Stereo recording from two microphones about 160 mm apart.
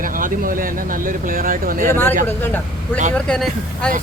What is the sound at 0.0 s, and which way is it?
Speech, 60° right (ahead or behind).